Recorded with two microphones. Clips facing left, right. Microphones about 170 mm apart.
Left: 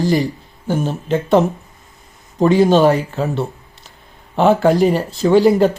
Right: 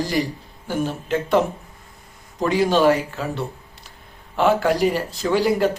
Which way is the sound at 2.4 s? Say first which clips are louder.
Left 5 dB; 25° left (ahead or behind).